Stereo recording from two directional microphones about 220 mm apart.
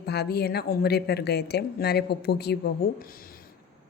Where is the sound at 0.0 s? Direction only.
45° left (ahead or behind).